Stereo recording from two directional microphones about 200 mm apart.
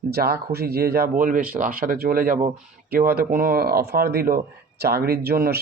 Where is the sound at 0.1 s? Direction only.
50° right (ahead or behind).